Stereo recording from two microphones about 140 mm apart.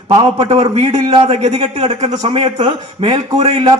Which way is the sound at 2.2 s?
40° right (ahead or behind).